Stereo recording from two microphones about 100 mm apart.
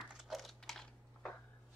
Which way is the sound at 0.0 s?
Centre (ahead or behind).